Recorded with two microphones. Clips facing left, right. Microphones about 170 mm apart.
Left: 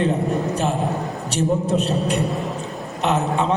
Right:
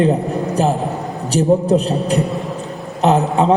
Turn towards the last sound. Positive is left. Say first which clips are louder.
# right 6 dB
turn(degrees=-35)  # may be behind; listen again after turning